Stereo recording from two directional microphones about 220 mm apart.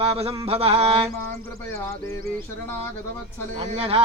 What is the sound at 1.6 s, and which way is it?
Speech, 15° left (ahead or behind).